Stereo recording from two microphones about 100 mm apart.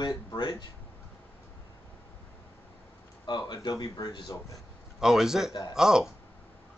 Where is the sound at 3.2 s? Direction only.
45° left (ahead or behind).